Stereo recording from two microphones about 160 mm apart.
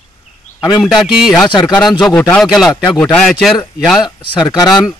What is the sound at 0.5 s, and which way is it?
A man's voice, centre (ahead or behind).